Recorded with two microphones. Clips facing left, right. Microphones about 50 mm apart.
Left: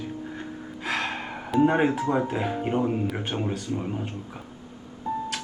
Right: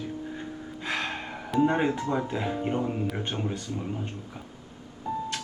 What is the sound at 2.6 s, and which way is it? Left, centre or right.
Speech, centre.